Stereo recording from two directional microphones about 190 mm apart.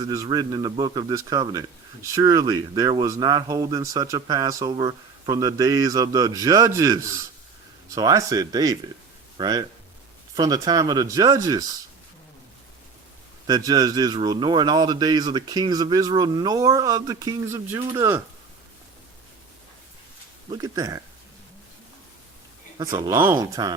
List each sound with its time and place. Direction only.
0.0 s a man's voice: 20° right (ahead or behind)
13.5 s a man's voice: 20° right (ahead or behind)
20.5 s a man's voice: 20° right (ahead or behind)
22.8 s speech: 15° right (ahead or behind)